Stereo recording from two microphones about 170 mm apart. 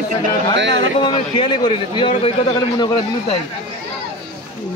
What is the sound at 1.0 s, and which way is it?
A man's voice, 25° left (ahead or behind).